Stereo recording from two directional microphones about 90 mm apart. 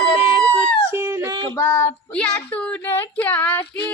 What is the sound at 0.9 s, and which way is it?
Yodeling, 30° right (ahead or behind).